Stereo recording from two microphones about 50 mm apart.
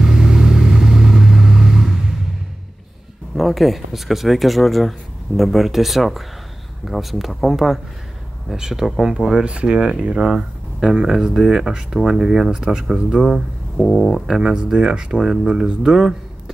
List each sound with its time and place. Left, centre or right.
0.0 s vehicle: centre
3.3 s speech: centre
9.4 s speech: right
13.7 s speech: left
14.2 s speech: centre